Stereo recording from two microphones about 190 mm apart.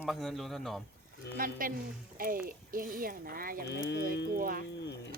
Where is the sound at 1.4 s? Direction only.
45° right (ahead or behind).